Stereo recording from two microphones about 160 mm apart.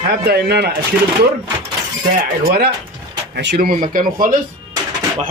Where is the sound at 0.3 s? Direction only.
90° right.